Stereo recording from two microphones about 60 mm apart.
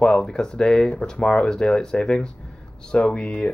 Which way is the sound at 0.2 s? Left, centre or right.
Centre.